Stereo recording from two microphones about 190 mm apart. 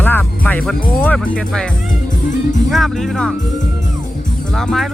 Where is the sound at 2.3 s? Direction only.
40° left (ahead or behind).